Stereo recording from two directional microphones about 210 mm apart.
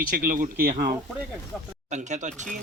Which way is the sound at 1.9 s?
35° right (ahead or behind).